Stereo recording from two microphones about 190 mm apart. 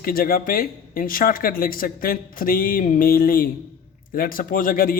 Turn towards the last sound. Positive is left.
turn(degrees=50)  # may be behind; listen again after turning